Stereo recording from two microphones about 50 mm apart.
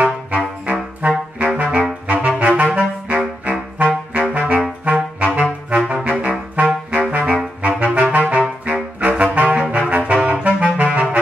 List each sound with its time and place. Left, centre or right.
0.7 s brass instrument: right
2.0 s saxophone: right
6.0 s music: right
7.1 s saxophone: right